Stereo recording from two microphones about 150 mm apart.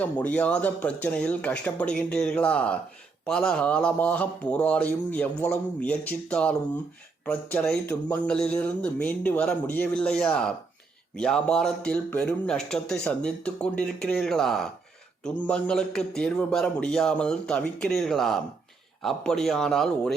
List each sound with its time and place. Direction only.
0.0 s speech: 10° left (ahead or behind)